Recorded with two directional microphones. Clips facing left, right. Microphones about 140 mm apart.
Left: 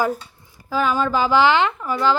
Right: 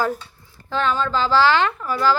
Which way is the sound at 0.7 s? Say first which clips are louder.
Left 2 dB; 10° left (ahead or behind).